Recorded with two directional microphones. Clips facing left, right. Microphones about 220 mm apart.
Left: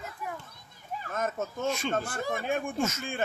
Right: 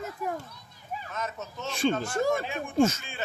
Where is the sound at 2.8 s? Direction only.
30° right (ahead or behind).